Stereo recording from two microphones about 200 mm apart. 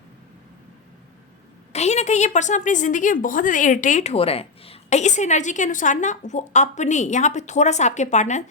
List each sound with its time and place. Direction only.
1.7 s a woman's voice: 35° left (ahead or behind)